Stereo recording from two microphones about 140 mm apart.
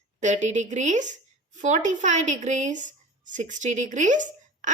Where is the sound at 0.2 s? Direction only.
60° right (ahead or behind).